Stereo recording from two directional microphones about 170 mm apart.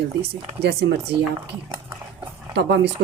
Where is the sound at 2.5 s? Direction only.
85° right.